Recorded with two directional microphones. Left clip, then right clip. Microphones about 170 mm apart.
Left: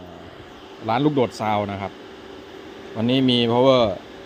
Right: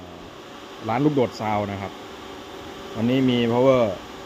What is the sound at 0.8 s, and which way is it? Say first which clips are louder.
Speech: left 1 dB; 10° left (ahead or behind).